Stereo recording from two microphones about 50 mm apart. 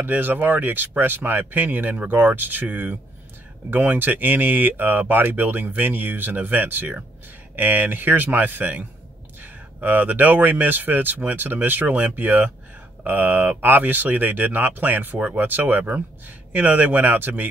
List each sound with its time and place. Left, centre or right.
0.0 s speech: right
15.1 s speech: right